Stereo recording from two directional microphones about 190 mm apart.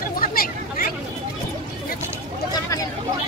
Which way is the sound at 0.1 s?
50° left (ahead or behind).